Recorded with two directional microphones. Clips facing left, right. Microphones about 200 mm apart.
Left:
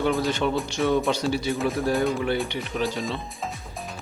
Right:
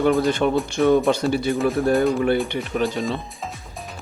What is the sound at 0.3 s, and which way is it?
Speech, 55° right (ahead or behind).